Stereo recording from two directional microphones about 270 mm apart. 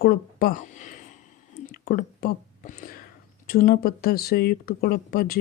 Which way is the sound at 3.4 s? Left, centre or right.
Left.